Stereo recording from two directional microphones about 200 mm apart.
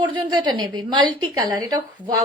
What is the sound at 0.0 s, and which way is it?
A woman's voice, 20° right (ahead or behind).